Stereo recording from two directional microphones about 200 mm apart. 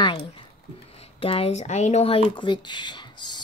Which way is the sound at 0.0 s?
25° left (ahead or behind).